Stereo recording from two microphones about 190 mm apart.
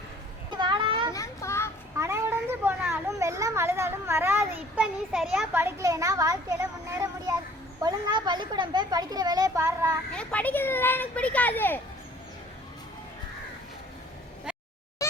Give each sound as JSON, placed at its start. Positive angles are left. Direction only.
{"t": 0.5, "sound": "a sound", "side_deg": -25}
{"t": 1.1, "sound": "children playing", "side_deg": 15}
{"t": 2.0, "sound": "children playing", "side_deg": -15}
{"t": 4.8, "sound": "a child's voice", "side_deg": -5}
{"t": 5.5, "sound": "a child's voice", "side_deg": -15}
{"t": 10.1, "sound": "speech", "side_deg": 5}